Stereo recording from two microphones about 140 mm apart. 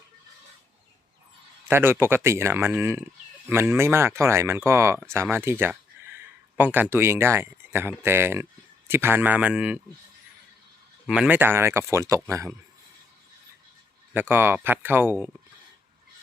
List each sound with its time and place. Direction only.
1.6 s speech: 15° right (ahead or behind)
11.0 s speech: 5° right (ahead or behind); by 12.5 s 20° right (ahead or behind)
14.1 s speech: 15° right (ahead or behind)